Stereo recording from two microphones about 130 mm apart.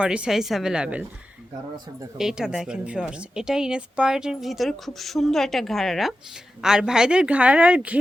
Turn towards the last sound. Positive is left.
turn(degrees=-10)  # may be behind; listen again after turning